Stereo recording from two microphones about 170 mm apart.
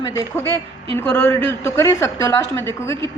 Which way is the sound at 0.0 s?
20° left (ahead or behind).